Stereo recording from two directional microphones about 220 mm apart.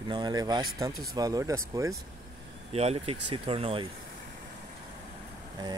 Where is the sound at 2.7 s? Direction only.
30° right (ahead or behind).